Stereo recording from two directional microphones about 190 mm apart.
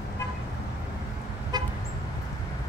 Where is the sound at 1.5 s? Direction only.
20° right (ahead or behind).